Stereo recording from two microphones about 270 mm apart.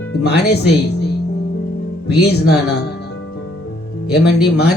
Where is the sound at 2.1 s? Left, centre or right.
Left.